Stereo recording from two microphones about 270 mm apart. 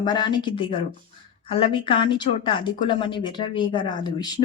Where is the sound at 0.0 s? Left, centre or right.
Centre.